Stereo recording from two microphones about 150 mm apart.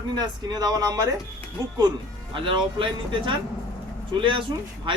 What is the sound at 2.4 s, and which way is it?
A man's voice, 35° right (ahead or behind).